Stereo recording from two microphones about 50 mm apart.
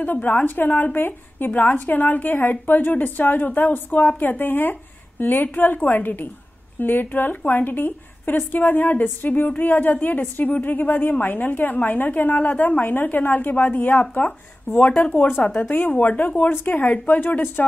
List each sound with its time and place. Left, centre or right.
0.0 s speech: left
15.4 s a woman's voice: left
15.7 s speech: left